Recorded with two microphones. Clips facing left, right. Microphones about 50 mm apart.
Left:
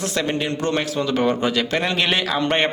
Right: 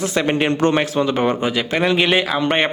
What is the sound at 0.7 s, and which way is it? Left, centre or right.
A man's voice, right.